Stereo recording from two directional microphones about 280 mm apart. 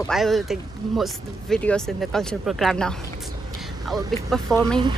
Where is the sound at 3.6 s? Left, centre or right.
Centre.